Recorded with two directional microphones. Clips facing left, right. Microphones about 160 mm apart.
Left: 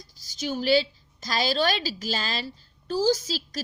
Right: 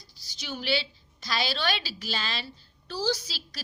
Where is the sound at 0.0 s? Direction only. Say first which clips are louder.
Left 11 dB; 45° left (ahead or behind).